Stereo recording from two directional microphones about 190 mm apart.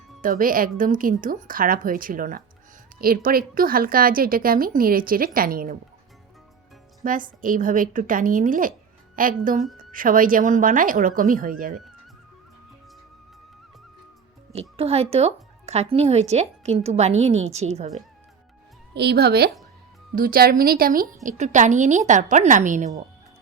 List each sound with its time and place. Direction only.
0.2 s a woman's voice: 45° right (ahead or behind)
7.0 s a woman's voice: 45° right (ahead or behind)
14.5 s speech: 30° right (ahead or behind)
18.9 s a woman's voice: 60° right (ahead or behind); by 22.9 s 40° right (ahead or behind)